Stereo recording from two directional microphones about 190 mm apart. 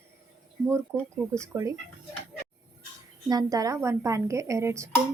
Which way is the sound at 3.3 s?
20° right (ahead or behind).